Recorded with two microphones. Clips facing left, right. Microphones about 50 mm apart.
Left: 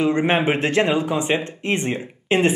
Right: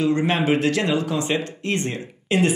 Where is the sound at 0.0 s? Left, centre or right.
Left.